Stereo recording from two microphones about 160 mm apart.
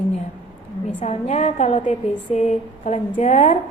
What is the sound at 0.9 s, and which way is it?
A woman's voice, 45° left (ahead or behind).